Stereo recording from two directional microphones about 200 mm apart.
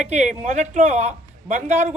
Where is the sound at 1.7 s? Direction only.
10° right (ahead or behind).